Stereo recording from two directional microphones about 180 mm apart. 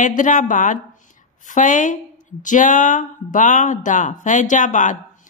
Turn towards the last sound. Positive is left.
turn(degrees=45)  # may be behind; listen again after turning